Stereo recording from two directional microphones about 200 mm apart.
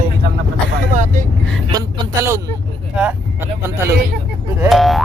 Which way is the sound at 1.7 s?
15° right (ahead or behind).